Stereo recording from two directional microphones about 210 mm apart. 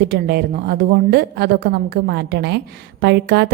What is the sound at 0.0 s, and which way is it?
A woman's voice, 50° right (ahead or behind).